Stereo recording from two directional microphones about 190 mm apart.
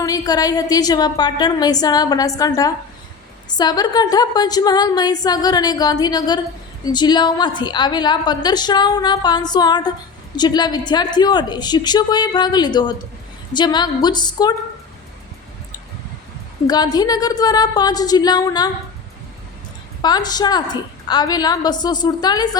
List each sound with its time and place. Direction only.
0.0 s a woman's voice: 20° left (ahead or behind)
16.6 s a woman's voice: 20° left (ahead or behind)
20.0 s a woman's voice: 20° left (ahead or behind)